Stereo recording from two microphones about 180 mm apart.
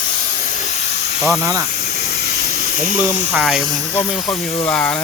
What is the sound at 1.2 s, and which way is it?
Speech, centre (ahead or behind).